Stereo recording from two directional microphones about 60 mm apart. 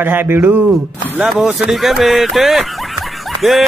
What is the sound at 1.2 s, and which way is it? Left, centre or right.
Speech, centre.